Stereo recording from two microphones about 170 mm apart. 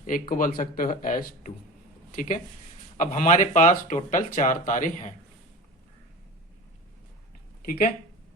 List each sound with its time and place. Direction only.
0.0 s speech: 55° left (ahead or behind)
7.6 s speech: 55° left (ahead or behind)